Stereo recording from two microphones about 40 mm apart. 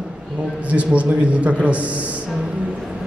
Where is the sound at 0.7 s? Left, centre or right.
Right.